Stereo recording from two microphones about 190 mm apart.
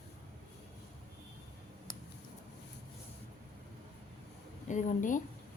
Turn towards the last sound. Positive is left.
turn(degrees=45)  # may be behind; listen again after turning